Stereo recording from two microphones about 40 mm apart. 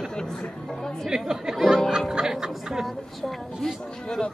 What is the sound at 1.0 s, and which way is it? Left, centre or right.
Speech, centre.